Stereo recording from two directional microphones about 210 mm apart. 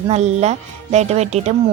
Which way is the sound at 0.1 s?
30° right (ahead or behind).